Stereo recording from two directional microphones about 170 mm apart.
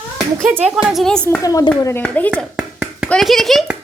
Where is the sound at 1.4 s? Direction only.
20° left (ahead or behind).